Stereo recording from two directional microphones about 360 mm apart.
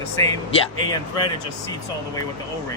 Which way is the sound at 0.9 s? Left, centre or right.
Centre.